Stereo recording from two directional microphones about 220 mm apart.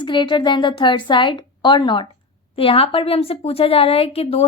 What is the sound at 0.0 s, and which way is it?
A woman's voice, 20° left (ahead or behind).